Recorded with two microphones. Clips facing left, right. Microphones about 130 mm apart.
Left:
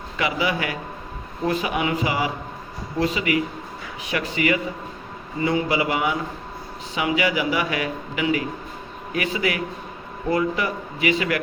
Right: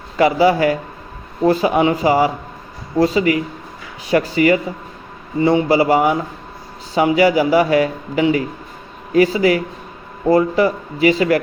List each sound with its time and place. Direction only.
0.2 s a man's voice: 35° right (ahead or behind)